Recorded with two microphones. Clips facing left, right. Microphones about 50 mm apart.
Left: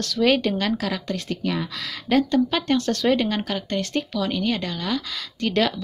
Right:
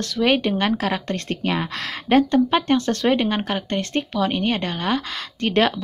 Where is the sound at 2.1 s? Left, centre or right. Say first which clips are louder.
Right 3 dB; right.